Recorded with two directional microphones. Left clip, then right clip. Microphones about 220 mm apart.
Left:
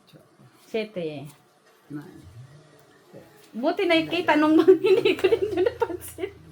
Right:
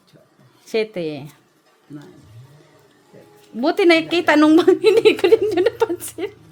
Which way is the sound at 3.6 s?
60° right (ahead or behind).